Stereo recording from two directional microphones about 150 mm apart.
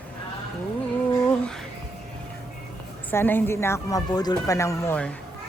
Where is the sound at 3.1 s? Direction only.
15° left (ahead or behind).